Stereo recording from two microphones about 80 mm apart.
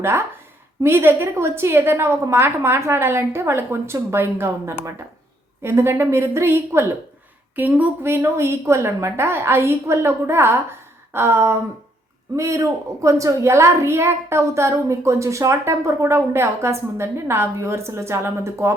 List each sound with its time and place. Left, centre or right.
0.0 s a child's voice: right